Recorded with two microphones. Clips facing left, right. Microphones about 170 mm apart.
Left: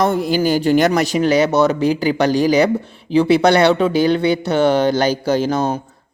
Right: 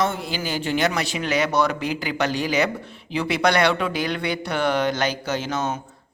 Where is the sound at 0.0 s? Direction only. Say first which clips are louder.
Left 9 dB; 40° left (ahead or behind).